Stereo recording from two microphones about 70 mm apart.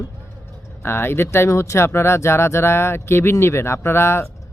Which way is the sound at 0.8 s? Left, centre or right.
Left.